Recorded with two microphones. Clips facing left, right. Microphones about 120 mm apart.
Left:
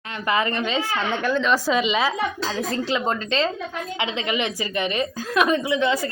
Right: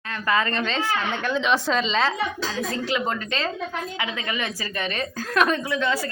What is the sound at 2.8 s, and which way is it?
A woman's voice, 25° left (ahead or behind).